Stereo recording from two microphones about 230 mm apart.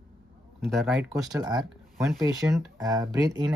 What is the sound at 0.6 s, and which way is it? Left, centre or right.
Speech, centre.